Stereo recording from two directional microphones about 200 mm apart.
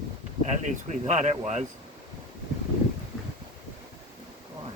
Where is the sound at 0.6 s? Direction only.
35° right (ahead or behind).